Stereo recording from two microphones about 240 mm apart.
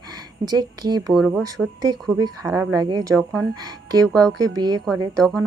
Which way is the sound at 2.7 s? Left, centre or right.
Centre.